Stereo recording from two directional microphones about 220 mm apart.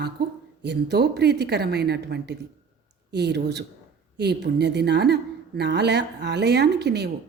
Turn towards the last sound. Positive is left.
turn(degrees=-50)  # may be behind; listen again after turning